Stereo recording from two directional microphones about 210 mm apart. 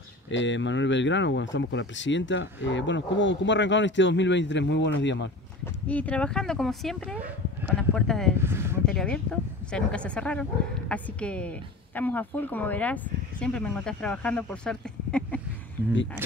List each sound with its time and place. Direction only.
0.3 s speech: 60° left (ahead or behind)
5.9 s a woman's voice: 5° left (ahead or behind)
8.4 s speech: 10° right (ahead or behind)
8.8 s a woman's voice: 5° left (ahead or behind)